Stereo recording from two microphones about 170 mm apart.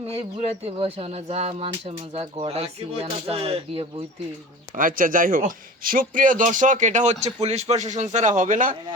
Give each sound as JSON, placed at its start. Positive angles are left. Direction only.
{"t": 0.3, "sound": "speech", "side_deg": -35}
{"t": 4.7, "sound": "a man's voice", "side_deg": -55}